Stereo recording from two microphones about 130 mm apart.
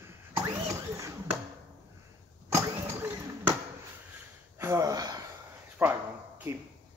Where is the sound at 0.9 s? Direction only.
25° right (ahead or behind).